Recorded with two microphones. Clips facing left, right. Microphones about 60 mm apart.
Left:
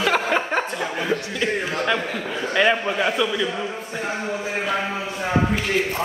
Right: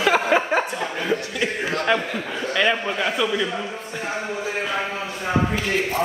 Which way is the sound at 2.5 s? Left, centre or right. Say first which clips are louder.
Left 2 dB; centre.